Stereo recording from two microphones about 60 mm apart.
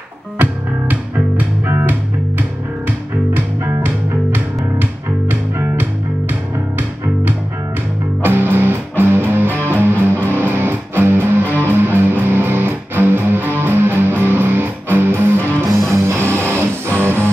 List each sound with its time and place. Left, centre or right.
0.4 s music: right
3.8 s music: right
8.2 s music: right
15.7 s music: centre
16.1 s music: right